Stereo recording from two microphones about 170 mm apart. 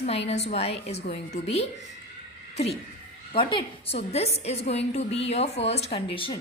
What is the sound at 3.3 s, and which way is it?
A woman's voice, 35° left (ahead or behind).